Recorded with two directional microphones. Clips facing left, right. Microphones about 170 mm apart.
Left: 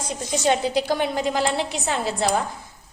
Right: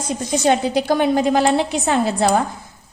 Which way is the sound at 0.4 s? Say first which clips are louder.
Right 4 dB; 55° right (ahead or behind).